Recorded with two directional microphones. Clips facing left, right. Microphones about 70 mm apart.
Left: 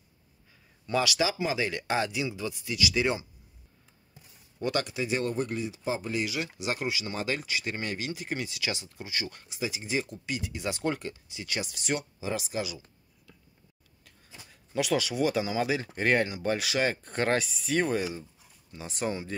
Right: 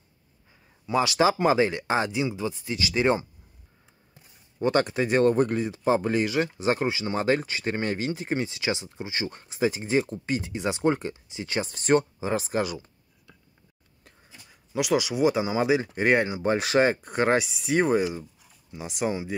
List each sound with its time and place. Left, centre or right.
1.0 s speech: right
1.7 s speech: right
4.6 s speech: right
14.5 s speech: centre